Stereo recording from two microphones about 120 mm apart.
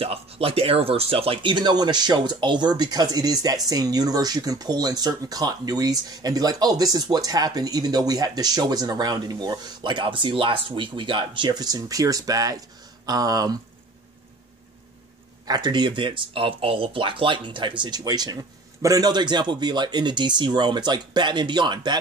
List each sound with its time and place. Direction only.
0.0 s speech: 55° right (ahead or behind); by 13.6 s 30° right (ahead or behind)
15.4 s speech: 35° right (ahead or behind)